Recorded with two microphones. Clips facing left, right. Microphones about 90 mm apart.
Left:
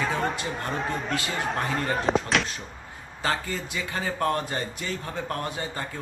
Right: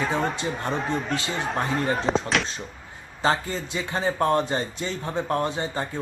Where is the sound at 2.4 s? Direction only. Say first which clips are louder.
Even; centre (ahead or behind).